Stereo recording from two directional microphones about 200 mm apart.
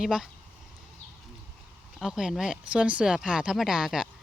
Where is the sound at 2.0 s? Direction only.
5° right (ahead or behind).